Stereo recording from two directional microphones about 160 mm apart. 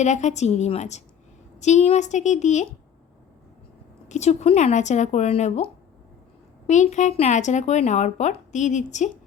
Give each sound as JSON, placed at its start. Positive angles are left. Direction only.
{"t": 0.0, "sound": "speech", "side_deg": 45}
{"t": 4.1, "sound": "speech", "side_deg": 45}